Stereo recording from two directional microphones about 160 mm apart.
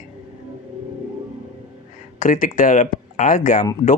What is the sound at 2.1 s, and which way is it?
Speech, 55° left (ahead or behind).